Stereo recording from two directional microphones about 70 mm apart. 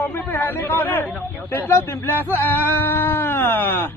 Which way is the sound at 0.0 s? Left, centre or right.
Left.